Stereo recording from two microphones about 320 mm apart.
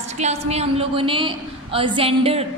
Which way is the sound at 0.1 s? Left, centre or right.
Centre.